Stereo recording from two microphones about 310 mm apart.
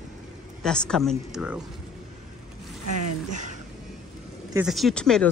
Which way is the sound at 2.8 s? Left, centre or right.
Right.